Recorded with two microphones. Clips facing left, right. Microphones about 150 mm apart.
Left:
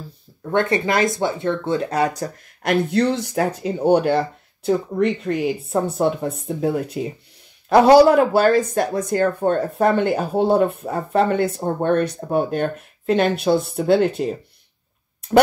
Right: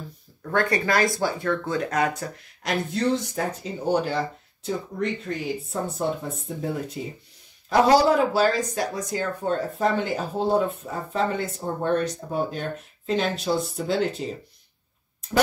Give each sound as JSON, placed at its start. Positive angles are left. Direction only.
{"t": 0.4, "sound": "speech", "side_deg": 25}
{"t": 2.6, "sound": "speech", "side_deg": 65}